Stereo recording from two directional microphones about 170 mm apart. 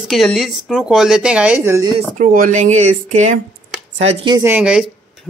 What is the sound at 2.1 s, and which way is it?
Speech, 55° right (ahead or behind).